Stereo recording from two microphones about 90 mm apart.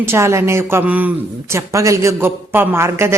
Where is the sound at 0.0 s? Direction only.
30° right (ahead or behind).